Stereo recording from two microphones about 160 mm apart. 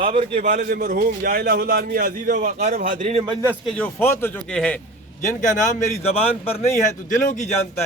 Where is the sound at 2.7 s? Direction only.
60° right (ahead or behind).